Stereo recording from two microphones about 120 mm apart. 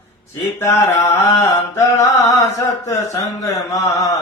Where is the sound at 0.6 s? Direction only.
25° left (ahead or behind).